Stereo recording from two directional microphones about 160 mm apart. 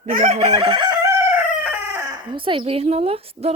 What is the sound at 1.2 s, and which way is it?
Chicken, 15° right (ahead or behind).